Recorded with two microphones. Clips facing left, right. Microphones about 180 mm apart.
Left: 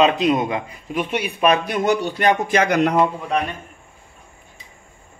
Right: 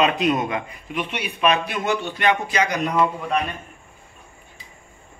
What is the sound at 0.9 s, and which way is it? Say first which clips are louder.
Speech: left 5 dB; 40° left (ahead or behind).